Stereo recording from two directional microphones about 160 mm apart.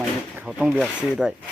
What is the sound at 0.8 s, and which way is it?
Speech, 10° left (ahead or behind).